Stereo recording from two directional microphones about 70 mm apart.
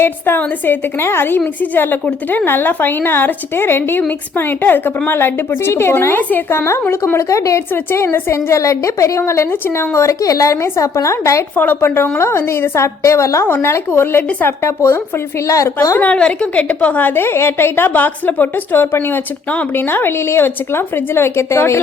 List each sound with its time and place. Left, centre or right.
0.0 s a woman's voice: left
9.9 s a woman's voice: left
11.5 s a woman's voice: left
11.9 s a woman's voice: left
15.4 s a woman's voice: left
16.0 s a woman's voice: centre; by 21.8 s left